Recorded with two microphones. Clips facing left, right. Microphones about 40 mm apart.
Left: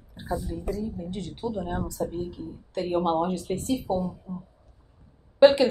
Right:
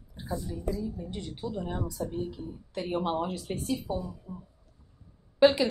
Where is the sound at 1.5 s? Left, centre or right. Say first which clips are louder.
Left 3 dB; centre.